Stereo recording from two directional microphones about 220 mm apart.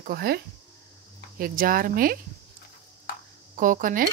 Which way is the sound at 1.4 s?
40° right (ahead or behind).